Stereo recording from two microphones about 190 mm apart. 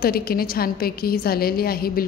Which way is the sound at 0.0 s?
50° left (ahead or behind).